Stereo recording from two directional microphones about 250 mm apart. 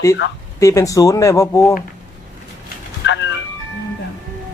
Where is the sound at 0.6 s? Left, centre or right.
Centre.